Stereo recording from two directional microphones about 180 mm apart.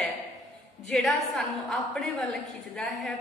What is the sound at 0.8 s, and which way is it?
A woman's voice, centre (ahead or behind).